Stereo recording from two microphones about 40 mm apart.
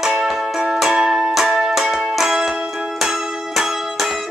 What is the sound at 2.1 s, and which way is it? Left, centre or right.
Music, centre.